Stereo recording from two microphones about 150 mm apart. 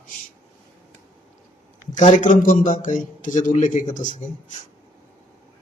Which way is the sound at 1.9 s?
55° left (ahead or behind).